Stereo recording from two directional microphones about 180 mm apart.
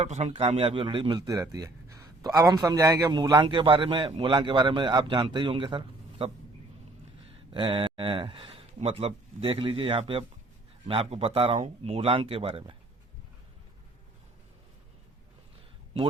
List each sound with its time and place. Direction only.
0.0 s a man's voice: 35° right (ahead or behind)